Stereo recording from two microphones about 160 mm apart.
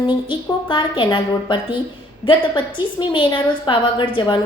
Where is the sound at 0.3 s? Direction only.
30° left (ahead or behind).